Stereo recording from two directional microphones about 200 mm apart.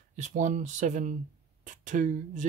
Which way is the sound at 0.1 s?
40° right (ahead or behind).